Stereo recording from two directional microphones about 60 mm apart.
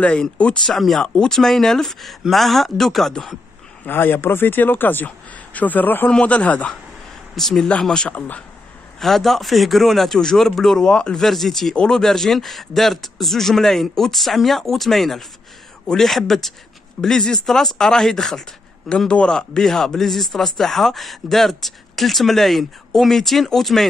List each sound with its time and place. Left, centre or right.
0.0 s speech: left
0.7 s a man's voice: centre
3.8 s speech: left
7.3 s speech: centre
7.9 s speech: centre
9.0 s a man's voice: centre